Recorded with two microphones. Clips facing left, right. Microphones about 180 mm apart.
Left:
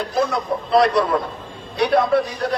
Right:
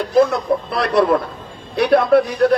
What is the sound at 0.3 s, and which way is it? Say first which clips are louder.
A man's voice: right 2 dB; 60° right (ahead or behind).